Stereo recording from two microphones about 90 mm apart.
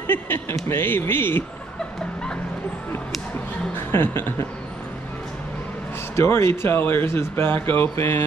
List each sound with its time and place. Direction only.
0.0 s speech: 25° left (ahead or behind)
3.9 s speech: 25° left (ahead or behind)
6.1 s speech: 30° left (ahead or behind)